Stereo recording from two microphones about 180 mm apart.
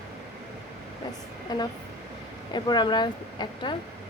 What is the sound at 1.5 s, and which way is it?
A woman's voice, 20° left (ahead or behind).